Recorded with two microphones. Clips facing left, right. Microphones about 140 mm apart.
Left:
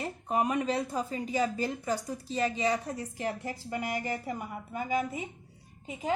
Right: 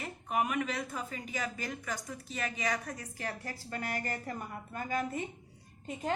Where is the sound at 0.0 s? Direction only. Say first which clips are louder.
Left 4 dB; 30° left (ahead or behind).